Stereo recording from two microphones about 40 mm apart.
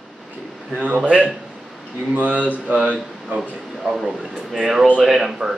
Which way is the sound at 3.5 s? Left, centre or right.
Centre.